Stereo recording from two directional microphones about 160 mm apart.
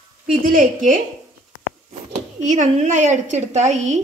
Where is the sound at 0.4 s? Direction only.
60° right (ahead or behind).